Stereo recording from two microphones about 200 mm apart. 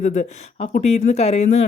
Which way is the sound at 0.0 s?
40° left (ahead or behind).